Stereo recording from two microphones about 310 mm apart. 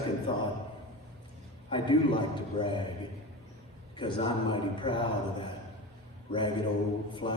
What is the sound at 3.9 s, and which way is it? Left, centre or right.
A man's voice, centre.